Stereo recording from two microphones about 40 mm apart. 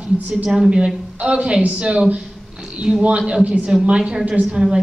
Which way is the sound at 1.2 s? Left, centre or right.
Right.